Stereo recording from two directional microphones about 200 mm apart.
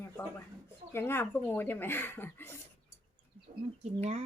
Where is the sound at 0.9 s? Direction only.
10° left (ahead or behind).